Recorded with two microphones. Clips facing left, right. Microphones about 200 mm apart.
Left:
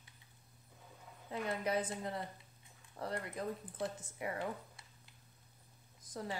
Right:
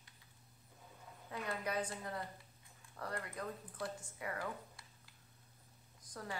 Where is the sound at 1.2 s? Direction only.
25° left (ahead or behind).